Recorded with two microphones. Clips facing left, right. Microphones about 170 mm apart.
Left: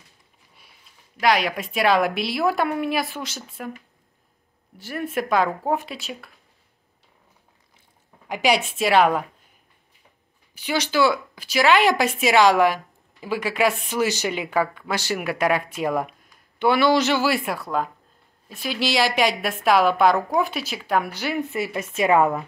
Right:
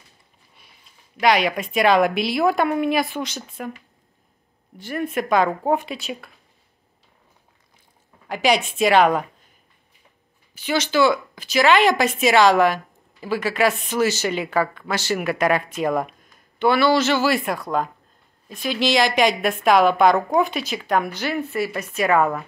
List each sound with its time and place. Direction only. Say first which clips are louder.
1.2 s a woman's voice: right 2 dB; centre (ahead or behind)
4.7 s a woman's voice: right 2 dB; 5° left (ahead or behind)
8.3 s a woman's voice: right 1 dB; 10° left (ahead or behind)
10.5 s a woman's voice: right 2 dB; 10° left (ahead or behind)